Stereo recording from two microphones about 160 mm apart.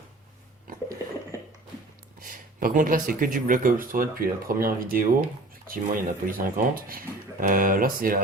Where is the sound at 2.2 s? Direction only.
60° right (ahead or behind).